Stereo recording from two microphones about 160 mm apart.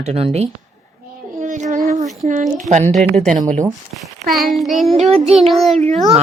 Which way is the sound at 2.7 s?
20° right (ahead or behind).